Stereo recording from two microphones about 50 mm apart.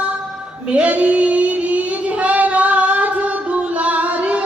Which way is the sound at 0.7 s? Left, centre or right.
Right.